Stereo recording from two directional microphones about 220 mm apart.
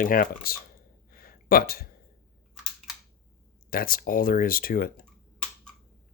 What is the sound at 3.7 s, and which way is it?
Speech, 40° left (ahead or behind).